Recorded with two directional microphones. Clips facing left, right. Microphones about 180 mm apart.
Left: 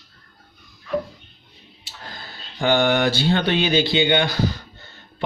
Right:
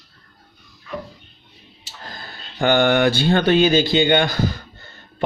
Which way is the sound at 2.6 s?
55° right (ahead or behind).